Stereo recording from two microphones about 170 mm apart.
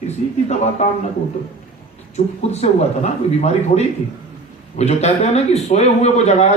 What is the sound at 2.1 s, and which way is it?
Speech, 40° left (ahead or behind).